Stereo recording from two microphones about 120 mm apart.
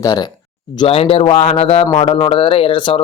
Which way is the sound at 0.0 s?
35° left (ahead or behind).